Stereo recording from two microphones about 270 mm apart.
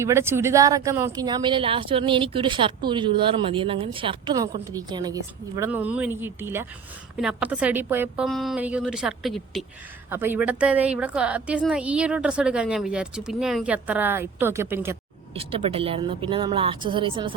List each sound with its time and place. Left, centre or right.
0.0 s a woman's voice: centre
15.4 s a woman's voice: right